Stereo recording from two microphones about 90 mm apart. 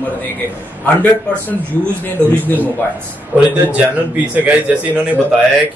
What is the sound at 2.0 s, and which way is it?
Speech, 20° left (ahead or behind).